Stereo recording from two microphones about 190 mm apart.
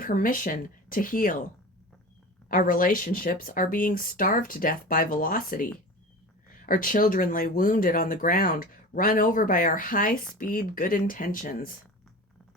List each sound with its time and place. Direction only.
0.0 s speech: 45° left (ahead or behind)
2.5 s speech: 45° left (ahead or behind)
6.7 s speech: 45° left (ahead or behind)